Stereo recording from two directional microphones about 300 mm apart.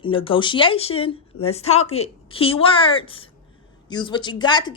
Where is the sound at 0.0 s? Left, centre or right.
Centre.